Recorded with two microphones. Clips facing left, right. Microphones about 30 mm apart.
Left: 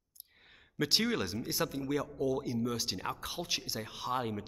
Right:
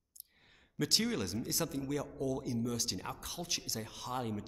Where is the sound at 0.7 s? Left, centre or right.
Left.